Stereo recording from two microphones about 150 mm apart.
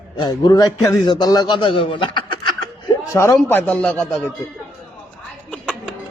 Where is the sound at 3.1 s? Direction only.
15° left (ahead or behind).